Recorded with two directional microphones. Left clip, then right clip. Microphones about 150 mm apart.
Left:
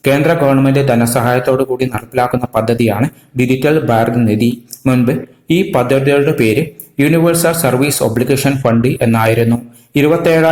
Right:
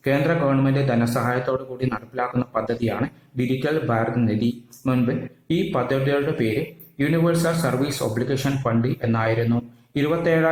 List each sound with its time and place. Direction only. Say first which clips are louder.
0.0 s speech: left 10 dB; 20° left (ahead or behind)